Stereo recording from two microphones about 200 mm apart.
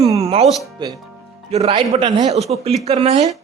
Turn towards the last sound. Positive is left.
turn(degrees=-30)  # may be behind; listen again after turning